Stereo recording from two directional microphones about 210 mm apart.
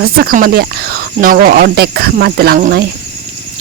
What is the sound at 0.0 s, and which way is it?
Speech, 45° right (ahead or behind).